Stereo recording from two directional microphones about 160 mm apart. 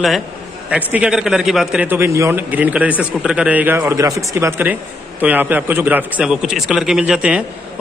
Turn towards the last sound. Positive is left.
turn(degrees=-5)  # may be behind; listen again after turning